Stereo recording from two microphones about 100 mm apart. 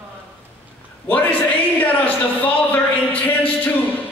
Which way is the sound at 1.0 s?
20° left (ahead or behind).